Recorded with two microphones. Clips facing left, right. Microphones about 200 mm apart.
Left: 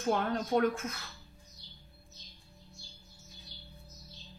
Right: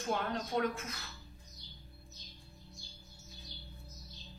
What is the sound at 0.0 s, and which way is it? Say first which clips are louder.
A man's voice: left 5 dB; 50° left (ahead or behind).